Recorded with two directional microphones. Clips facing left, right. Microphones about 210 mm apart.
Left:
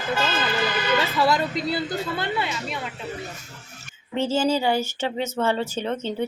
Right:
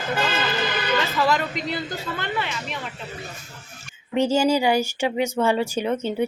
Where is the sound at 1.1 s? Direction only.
35° left (ahead or behind).